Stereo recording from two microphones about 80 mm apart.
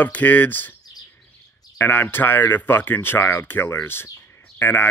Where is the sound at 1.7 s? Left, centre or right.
Left.